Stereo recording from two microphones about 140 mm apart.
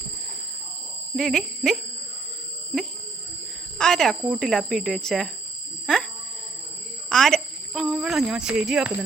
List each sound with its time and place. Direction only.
1.1 s speech: 5° left (ahead or behind)
3.8 s speech: 5° left (ahead or behind)
5.8 s a sound: 5° left (ahead or behind)
7.1 s speech: 5° left (ahead or behind)